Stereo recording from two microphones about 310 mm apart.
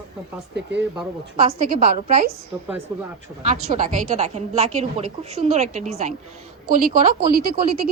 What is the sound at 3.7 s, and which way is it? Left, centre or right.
Speech, right.